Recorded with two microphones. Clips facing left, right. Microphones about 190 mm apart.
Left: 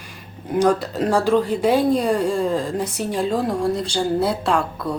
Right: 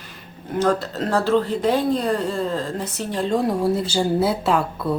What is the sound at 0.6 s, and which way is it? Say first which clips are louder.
Speech: left 3 dB; 10° left (ahead or behind).